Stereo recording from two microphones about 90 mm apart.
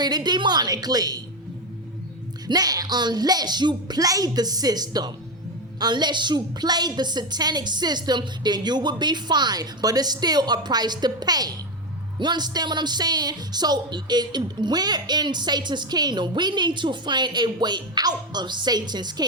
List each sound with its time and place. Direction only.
0.0 s speech: 50° right (ahead or behind)
2.5 s speech: 45° right (ahead or behind)